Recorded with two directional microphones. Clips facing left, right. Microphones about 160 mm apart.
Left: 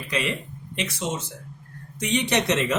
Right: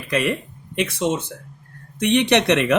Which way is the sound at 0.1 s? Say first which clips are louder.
Right 6 dB; 55° right (ahead or behind).